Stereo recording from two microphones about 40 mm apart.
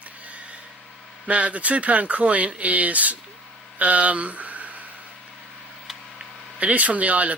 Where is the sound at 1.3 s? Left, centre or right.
Right.